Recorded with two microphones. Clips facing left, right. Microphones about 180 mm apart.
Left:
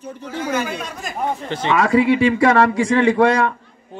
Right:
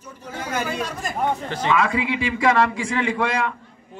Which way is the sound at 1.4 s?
25° left (ahead or behind).